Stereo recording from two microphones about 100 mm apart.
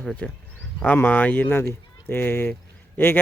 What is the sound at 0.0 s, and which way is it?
Speech, 5° left (ahead or behind).